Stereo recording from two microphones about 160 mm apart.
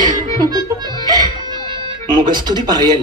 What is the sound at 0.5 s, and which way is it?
Music, 25° right (ahead or behind).